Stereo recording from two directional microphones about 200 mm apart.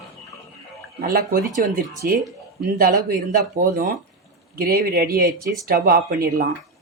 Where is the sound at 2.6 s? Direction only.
50° right (ahead or behind).